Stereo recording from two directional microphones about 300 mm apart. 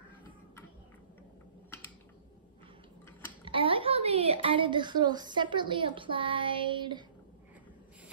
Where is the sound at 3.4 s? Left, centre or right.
Centre.